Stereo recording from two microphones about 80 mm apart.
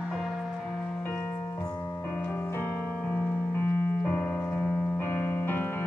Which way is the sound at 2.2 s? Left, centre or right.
Left.